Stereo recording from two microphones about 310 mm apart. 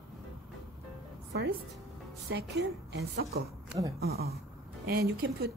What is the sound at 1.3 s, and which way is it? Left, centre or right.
A woman's voice, right.